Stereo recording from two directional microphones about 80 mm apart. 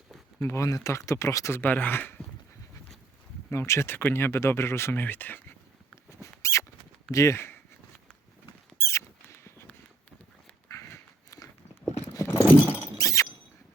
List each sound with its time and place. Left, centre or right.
0.4 s speech: left
1.5 s speech: left
3.7 s speech: left
6.4 s squeak: left
7.1 s speech: left
8.8 s rodents: left
10.7 s a sound: left
12.1 s clip-clop: left
12.5 s vehicle: centre
13.0 s a sound: left